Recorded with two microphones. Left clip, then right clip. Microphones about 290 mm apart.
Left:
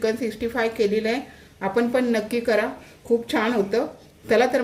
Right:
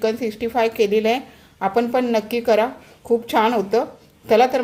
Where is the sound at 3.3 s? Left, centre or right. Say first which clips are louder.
Right 6 dB; right.